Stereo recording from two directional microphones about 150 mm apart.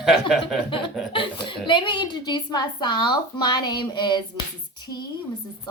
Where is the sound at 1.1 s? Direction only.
35° left (ahead or behind).